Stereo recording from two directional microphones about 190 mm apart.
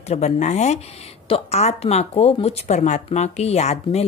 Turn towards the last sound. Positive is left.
turn(degrees=35)  # may be behind; listen again after turning